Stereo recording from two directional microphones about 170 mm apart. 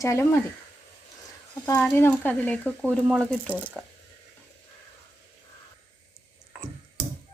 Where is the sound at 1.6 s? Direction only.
20° left (ahead or behind); by 3.9 s 5° left (ahead or behind).